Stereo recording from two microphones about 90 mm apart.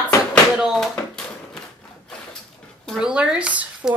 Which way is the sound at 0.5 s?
5° right (ahead or behind).